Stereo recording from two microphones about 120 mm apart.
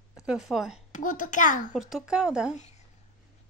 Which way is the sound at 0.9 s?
90° left.